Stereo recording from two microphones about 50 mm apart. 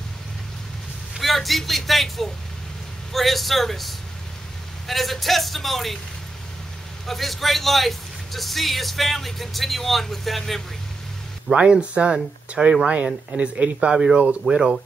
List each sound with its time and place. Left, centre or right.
1.1 s a man's voice: centre
7.1 s speech: centre
11.5 s speech: right